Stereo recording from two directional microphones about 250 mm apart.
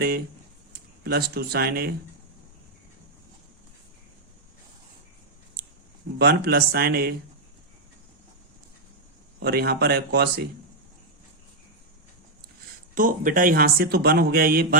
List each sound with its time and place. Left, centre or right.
0.7 s speech: right
5.6 s a sound: right
6.1 s speech: right
9.4 s speech: right
12.9 s speech: right